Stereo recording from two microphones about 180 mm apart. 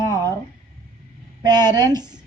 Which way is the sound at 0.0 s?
20° right (ahead or behind).